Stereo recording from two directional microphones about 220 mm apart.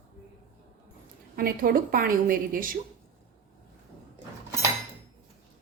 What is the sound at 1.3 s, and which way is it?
A woman's voice, 40° right (ahead or behind).